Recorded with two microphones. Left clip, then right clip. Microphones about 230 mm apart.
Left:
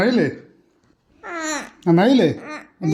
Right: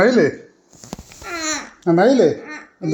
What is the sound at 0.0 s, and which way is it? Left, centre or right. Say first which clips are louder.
Speech: right 5 dB; left.